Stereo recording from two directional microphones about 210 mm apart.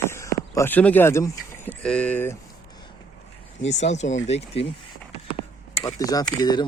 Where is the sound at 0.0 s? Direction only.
15° left (ahead or behind).